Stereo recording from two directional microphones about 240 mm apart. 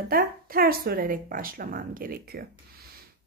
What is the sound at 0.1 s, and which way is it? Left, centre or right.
A woman's voice, right.